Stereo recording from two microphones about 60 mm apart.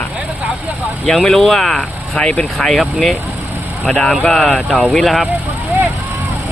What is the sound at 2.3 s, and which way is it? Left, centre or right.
Speech, left.